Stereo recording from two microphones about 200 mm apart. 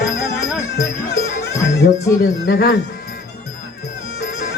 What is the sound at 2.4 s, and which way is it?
Speech, 55° left (ahead or behind).